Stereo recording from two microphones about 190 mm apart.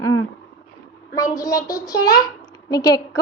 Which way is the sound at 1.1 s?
20° left (ahead or behind).